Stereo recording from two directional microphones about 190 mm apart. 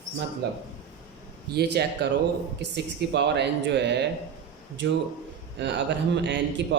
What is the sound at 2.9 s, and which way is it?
Speech, 65° right (ahead or behind).